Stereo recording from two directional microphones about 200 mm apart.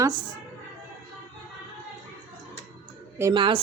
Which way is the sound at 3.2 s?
20° right (ahead or behind).